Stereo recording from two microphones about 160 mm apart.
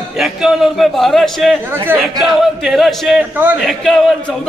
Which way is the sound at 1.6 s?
15° right (ahead or behind).